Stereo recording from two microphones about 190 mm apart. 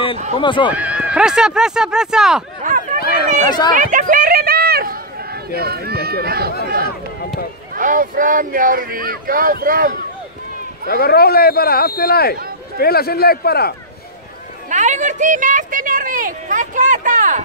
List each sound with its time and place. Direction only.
0.4 s speech: 25° left (ahead or behind)
0.7 s speech: 5° right (ahead or behind)
2.6 s a sound: 40° right (ahead or behind)
3.4 s speech: 20° left (ahead or behind)
3.7 s a sound: 45° right (ahead or behind)
7.7 s speech: 45° right (ahead or behind)
10.9 s a man's voice: 55° left (ahead or behind)
14.7 s speech: 40° right (ahead or behind)